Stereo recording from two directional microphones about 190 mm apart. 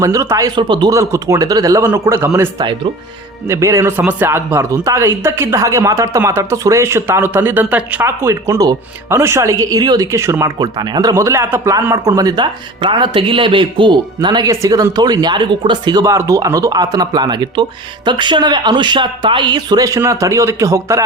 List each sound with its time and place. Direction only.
0.0 s speech: 15° right (ahead or behind)